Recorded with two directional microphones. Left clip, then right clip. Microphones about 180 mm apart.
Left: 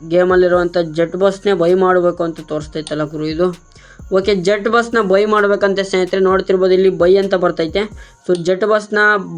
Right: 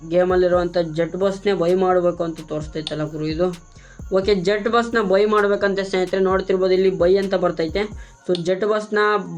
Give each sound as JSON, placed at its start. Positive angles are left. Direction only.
{"t": 0.1, "sound": "speech", "side_deg": 40}